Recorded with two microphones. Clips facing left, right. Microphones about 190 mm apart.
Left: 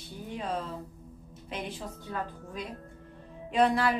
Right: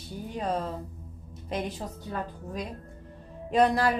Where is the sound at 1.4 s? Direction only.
40° right (ahead or behind).